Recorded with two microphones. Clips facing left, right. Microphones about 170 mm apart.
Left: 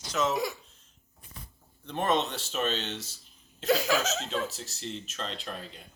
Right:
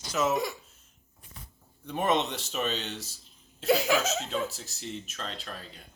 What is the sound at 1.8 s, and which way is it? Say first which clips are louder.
Speech: right 1 dB; 10° right (ahead or behind).